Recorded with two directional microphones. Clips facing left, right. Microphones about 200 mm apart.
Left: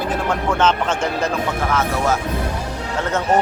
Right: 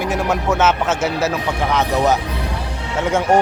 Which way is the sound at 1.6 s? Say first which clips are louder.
Right 5 dB; 15° right (ahead or behind).